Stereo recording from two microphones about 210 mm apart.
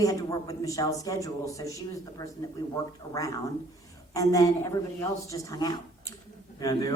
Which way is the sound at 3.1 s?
15° left (ahead or behind).